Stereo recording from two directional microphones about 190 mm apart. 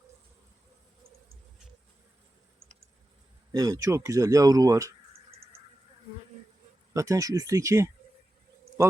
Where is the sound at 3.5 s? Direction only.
20° right (ahead or behind).